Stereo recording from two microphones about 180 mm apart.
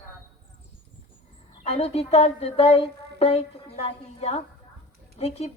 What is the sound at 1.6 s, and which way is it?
A woman's voice, 35° left (ahead or behind).